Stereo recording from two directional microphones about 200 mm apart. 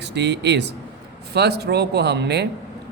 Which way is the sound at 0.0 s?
60° right (ahead or behind).